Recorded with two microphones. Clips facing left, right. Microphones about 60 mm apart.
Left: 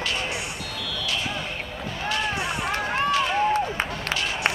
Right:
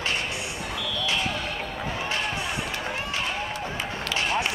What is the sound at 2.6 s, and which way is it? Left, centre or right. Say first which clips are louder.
Run: left 6 dB; left.